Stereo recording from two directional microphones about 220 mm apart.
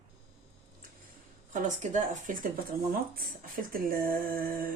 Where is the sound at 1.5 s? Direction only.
35° right (ahead or behind).